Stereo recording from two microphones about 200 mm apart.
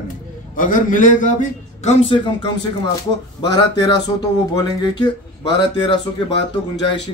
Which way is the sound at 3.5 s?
20° left (ahead or behind).